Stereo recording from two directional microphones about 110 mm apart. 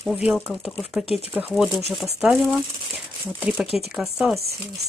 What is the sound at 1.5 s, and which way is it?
A woman's voice, 5° right (ahead or behind).